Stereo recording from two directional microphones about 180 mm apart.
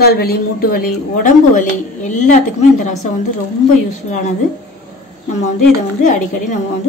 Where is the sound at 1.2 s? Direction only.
45° left (ahead or behind).